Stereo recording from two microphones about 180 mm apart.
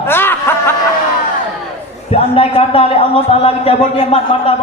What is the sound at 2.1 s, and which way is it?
A man's voice, 30° left (ahead or behind).